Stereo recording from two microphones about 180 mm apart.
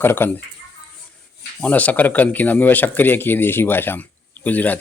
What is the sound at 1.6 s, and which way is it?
Speech, 10° left (ahead or behind).